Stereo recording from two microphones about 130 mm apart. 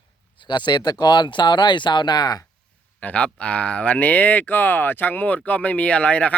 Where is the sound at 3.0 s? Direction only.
10° left (ahead or behind).